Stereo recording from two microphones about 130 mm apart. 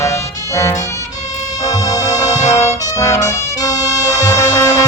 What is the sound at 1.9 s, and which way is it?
Music, 25° left (ahead or behind).